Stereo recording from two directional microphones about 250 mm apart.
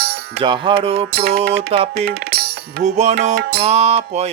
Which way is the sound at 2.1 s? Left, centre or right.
Right.